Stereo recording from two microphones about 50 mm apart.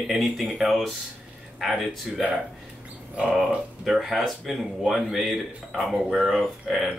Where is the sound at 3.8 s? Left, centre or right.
Centre.